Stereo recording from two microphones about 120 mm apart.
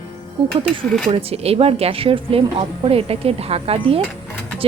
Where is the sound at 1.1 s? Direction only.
55° right (ahead or behind).